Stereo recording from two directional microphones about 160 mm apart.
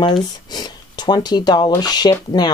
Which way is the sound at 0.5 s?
25° left (ahead or behind).